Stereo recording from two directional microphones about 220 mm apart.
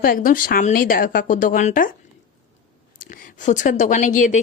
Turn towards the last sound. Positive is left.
turn(degrees=35)  # may be behind; listen again after turning